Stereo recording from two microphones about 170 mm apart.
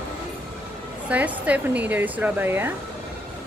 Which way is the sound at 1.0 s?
10° right (ahead or behind).